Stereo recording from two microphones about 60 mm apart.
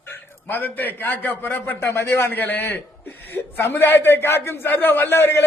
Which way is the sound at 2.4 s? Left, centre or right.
Left.